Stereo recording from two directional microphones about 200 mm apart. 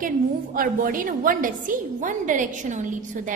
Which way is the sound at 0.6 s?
45° right (ahead or behind).